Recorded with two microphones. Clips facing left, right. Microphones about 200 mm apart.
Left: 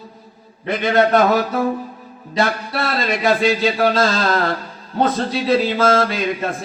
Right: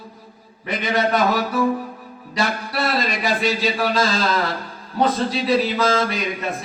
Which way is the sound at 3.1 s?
55° left (ahead or behind).